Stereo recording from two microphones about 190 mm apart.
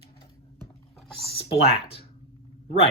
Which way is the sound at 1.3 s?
30° left (ahead or behind).